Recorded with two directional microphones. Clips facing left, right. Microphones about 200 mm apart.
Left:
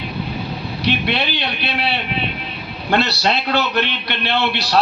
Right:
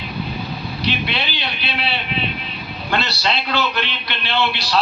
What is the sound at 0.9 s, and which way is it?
A man's voice, 55° left (ahead or behind).